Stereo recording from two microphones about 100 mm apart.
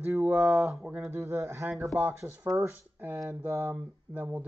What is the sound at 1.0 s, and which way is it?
Speech, 25° right (ahead or behind).